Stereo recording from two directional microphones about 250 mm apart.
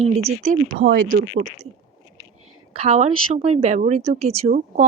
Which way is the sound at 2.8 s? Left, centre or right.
Right.